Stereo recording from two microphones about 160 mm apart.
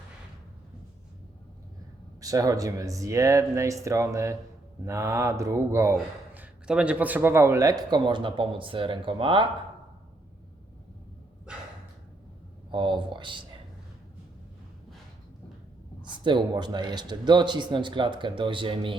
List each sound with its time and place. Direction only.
2.2 s speech: 20° right (ahead or behind)
12.7 s speech: 30° right (ahead or behind)
16.0 s speech: 30° right (ahead or behind)